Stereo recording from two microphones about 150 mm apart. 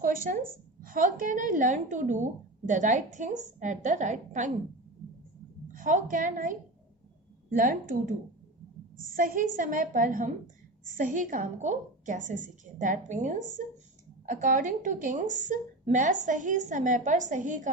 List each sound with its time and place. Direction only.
0.0 s a woman's voice: 65° right (ahead or behind)
5.7 s a woman's voice: 60° right (ahead or behind)
14.4 s a woman's voice: 60° right (ahead or behind)